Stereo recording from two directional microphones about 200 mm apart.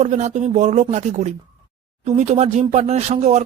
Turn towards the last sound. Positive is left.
turn(degrees=-35)  # may be behind; listen again after turning